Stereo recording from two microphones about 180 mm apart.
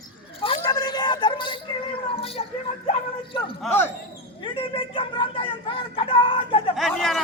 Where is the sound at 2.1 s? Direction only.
30° left (ahead or behind).